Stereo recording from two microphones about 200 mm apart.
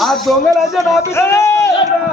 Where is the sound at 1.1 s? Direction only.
15° left (ahead or behind).